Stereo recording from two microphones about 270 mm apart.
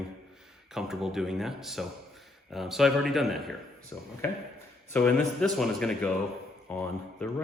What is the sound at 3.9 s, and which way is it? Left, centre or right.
Speech, centre.